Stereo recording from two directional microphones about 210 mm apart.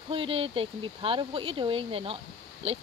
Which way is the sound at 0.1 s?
25° right (ahead or behind).